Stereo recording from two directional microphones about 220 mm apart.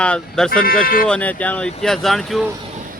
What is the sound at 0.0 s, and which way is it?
Speech, 5° left (ahead or behind).